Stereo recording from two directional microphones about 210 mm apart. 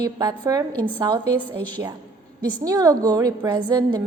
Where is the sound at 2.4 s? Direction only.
20° right (ahead or behind).